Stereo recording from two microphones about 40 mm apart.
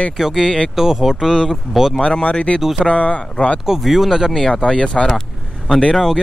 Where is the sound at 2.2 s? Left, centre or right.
Left.